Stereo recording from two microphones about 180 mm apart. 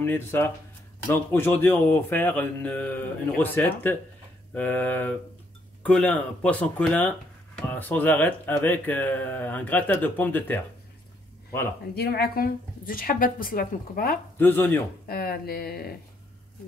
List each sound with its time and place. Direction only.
0.0 s speech: 10° left (ahead or behind)
11.9 s speech: 60° left (ahead or behind)
14.4 s speech: 10° left (ahead or behind)
15.0 s speech: 55° left (ahead or behind)